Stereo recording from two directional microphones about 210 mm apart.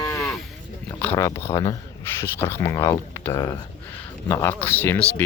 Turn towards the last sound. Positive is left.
turn(degrees=10)  # may be behind; listen again after turning